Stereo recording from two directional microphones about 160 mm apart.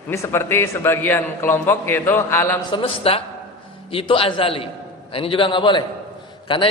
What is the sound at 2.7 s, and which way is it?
A man's voice, 35° left (ahead or behind).